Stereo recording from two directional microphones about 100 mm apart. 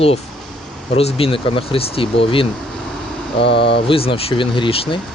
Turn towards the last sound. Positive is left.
turn(degrees=70)  # may be behind; listen again after turning